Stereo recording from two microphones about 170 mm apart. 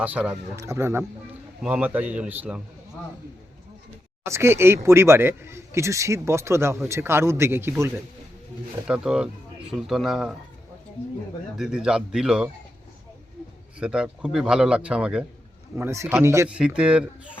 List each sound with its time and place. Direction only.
0.0 s speech: 10° right (ahead or behind)
4.3 s a man's voice: 15° right (ahead or behind)
11.5 s a man's voice: 5° right (ahead or behind)
13.7 s a man's voice: 5° right (ahead or behind)
16.5 s a man's voice: 5° right (ahead or behind)